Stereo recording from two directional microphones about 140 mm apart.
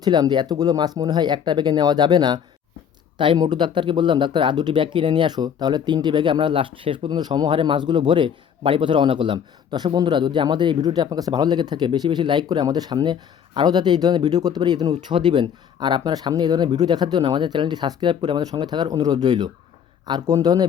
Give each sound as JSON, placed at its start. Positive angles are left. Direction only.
{"t": 0.0, "sound": "speech", "side_deg": -30}